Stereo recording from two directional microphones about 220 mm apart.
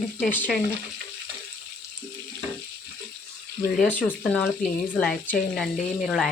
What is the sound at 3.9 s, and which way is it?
Speech, 10° left (ahead or behind).